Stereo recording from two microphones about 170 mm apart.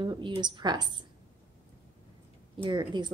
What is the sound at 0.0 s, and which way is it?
A woman's voice, 25° right (ahead or behind).